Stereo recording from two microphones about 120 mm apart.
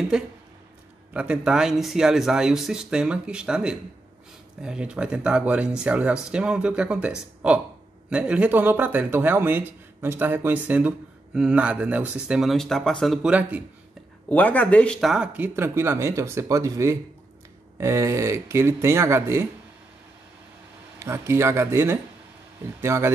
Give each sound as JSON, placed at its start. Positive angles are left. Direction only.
{"t": 0.1, "sound": "speech", "side_deg": -5}
{"t": 13.3, "sound": "speech", "side_deg": -10}
{"t": 14.3, "sound": "speech", "side_deg": 15}
{"t": 15.0, "sound": "speech", "side_deg": 0}
{"t": 15.3, "sound": "speech", "side_deg": -15}
{"t": 21.0, "sound": "speech", "side_deg": -20}